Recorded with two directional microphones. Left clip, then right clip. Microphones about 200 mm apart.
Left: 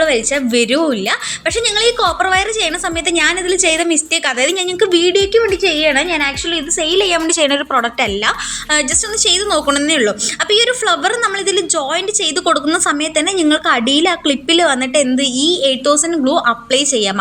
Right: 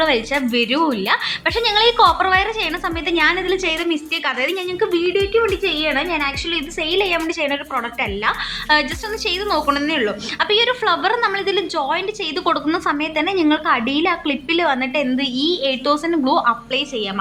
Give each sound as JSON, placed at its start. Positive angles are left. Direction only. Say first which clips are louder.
{"t": 0.0, "sound": "a woman's voice", "louder": "left 3 dB", "side_deg": 10}